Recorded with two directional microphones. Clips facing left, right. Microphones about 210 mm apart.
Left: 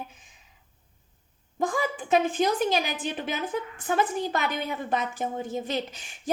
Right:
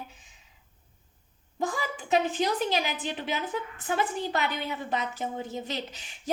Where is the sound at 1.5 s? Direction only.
50° left (ahead or behind).